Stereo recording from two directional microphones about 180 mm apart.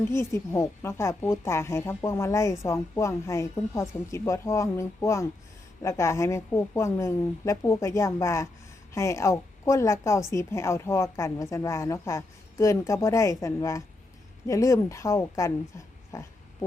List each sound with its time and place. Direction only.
0.0 s speech: 15° left (ahead or behind)